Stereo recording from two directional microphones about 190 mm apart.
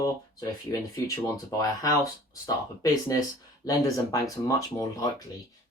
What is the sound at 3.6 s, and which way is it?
Speech, 20° left (ahead or behind).